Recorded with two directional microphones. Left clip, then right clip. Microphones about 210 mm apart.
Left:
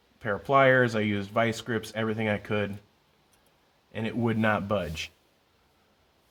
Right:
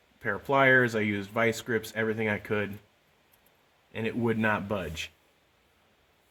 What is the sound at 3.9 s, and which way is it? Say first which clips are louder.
Speech: even; 40° left (ahead or behind).